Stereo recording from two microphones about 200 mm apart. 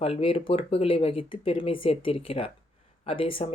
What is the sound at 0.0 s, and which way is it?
Speech, 30° left (ahead or behind).